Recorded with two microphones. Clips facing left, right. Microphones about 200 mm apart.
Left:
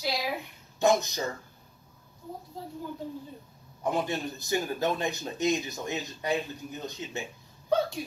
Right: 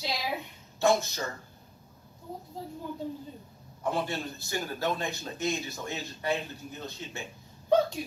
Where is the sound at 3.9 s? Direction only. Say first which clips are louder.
Left 2 dB; 15° left (ahead or behind).